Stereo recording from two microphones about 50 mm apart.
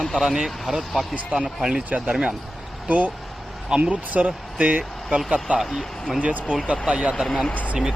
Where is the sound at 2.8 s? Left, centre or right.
Right.